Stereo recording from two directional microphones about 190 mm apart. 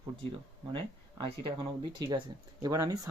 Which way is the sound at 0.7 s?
25° right (ahead or behind).